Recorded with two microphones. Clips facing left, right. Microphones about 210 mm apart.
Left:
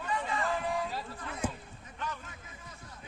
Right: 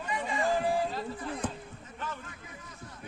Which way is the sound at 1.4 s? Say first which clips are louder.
Left 2 dB; 10° left (ahead or behind).